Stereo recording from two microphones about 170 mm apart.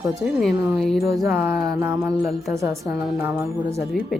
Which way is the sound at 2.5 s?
15° right (ahead or behind).